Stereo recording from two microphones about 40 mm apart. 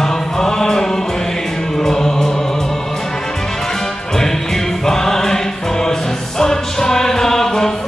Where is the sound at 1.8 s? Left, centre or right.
Centre.